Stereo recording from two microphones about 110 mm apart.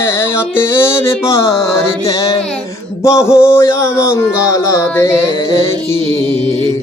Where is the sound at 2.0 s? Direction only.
30° left (ahead or behind).